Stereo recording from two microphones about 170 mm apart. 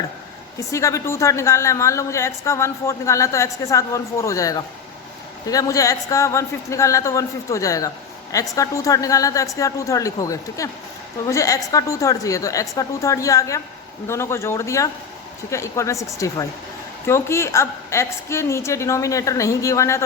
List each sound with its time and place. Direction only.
0.7 s a woman's voice: 20° left (ahead or behind)